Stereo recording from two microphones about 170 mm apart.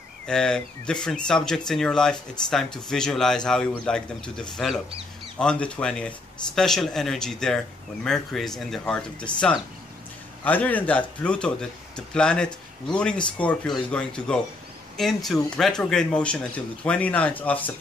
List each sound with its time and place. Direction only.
0.3 s speech: 5° left (ahead or behind)